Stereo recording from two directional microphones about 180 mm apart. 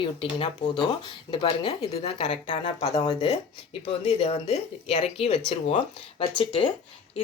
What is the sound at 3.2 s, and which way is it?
Speech, 35° left (ahead or behind).